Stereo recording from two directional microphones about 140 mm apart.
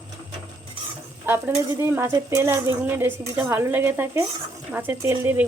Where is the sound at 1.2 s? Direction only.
15° right (ahead or behind).